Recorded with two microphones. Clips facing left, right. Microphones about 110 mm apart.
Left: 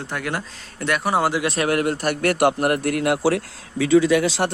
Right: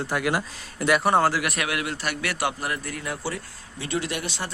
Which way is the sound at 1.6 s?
45° left (ahead or behind).